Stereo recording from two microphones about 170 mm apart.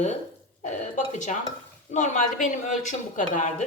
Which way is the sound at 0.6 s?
45° left (ahead or behind).